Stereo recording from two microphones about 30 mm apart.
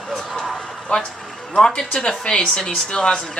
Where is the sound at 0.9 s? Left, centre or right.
Left.